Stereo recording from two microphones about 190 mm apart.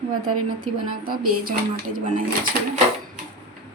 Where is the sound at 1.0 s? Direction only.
50° right (ahead or behind).